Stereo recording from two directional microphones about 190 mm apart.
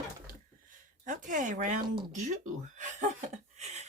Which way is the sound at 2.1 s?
40° right (ahead or behind).